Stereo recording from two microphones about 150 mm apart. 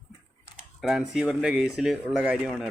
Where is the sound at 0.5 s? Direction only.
Centre (ahead or behind).